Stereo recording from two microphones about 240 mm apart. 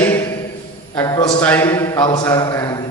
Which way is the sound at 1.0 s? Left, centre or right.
Centre.